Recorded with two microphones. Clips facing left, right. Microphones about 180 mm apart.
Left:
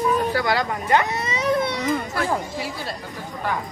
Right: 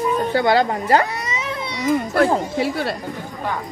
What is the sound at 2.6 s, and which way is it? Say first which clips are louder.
Speech: right 8 dB; 65° right (ahead or behind).